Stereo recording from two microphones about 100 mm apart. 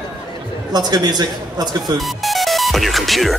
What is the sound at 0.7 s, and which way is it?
Speech, 45° right (ahead or behind).